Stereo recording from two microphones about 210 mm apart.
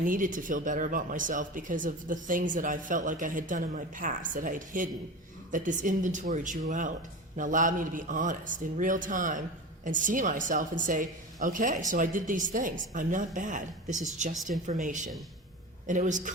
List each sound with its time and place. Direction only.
0.0 s speech: 40° right (ahead or behind)